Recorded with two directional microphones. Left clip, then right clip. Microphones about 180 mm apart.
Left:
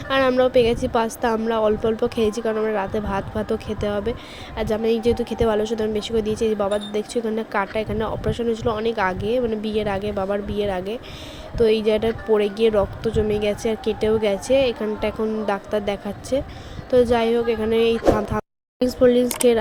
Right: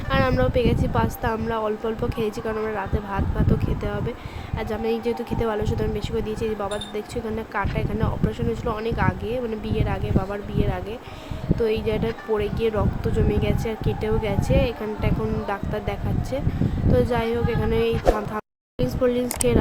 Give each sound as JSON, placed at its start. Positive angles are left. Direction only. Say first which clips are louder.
{"t": 0.1, "sound": "speech", "louder": "left 5 dB", "side_deg": 15}